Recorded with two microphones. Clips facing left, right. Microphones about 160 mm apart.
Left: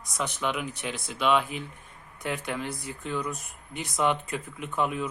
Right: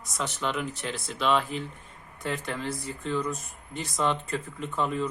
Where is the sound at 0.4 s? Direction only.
5° left (ahead or behind).